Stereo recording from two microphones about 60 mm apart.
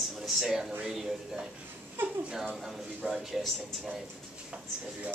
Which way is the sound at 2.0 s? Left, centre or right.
Right.